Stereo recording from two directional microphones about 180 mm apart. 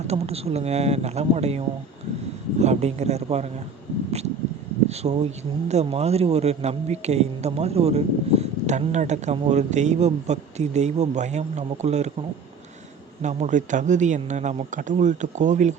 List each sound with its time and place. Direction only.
0.1 s a man's voice: 35° right (ahead or behind)
4.9 s a man's voice: 40° right (ahead or behind)
13.2 s speech: 45° right (ahead or behind)